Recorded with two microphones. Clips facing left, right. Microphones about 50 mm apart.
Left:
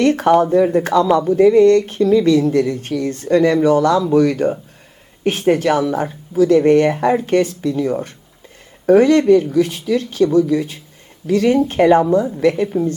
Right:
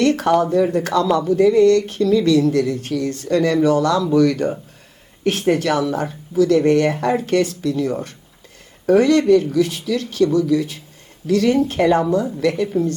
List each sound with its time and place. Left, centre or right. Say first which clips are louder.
0.0 s speech: left 3 dB; left